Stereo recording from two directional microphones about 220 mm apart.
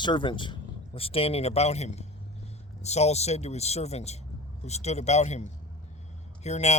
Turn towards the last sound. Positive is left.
turn(degrees=30)  # may be behind; listen again after turning